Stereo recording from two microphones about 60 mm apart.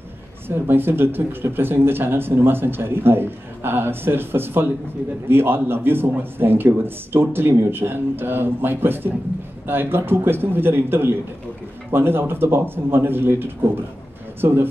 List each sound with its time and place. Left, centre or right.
0.7 s speech: right